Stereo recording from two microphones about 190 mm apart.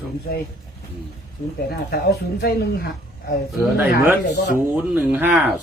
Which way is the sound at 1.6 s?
60° left (ahead or behind).